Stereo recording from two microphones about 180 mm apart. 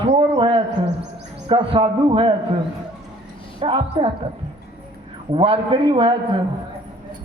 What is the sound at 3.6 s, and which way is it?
Speech, 30° right (ahead or behind).